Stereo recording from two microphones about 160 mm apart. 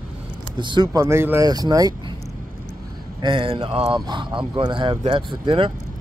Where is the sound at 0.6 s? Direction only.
30° right (ahead or behind).